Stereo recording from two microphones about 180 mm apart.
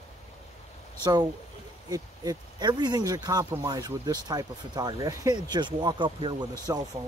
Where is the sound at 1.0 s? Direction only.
25° right (ahead or behind).